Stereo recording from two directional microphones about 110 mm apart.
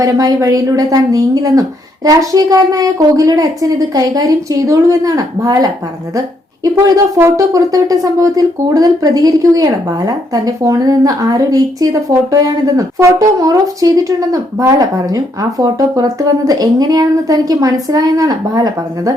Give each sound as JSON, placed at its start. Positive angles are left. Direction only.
{"t": 0.0, "sound": "speech", "side_deg": -35}
{"t": 7.2, "sound": "speech", "side_deg": -30}